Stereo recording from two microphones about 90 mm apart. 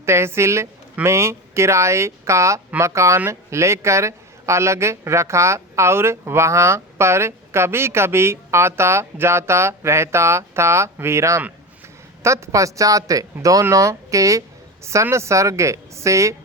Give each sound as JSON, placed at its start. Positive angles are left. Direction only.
{"t": 0.0, "sound": "speech", "side_deg": -30}